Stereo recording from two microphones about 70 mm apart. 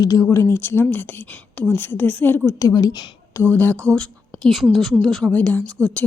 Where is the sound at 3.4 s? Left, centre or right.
Left.